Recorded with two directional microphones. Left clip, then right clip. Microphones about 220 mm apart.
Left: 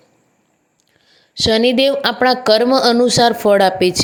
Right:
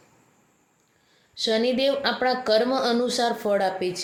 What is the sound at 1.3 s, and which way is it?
Speech, 35° left (ahead or behind).